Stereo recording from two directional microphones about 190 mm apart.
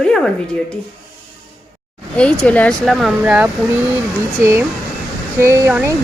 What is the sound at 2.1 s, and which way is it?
A woman's voice, 5° left (ahead or behind).